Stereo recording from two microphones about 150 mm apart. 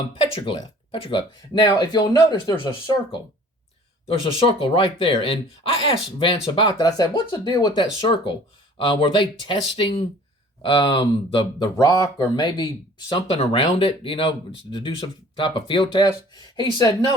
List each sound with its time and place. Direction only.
0.4 s speech: 35° left (ahead or behind)
4.3 s speech: 35° left (ahead or behind)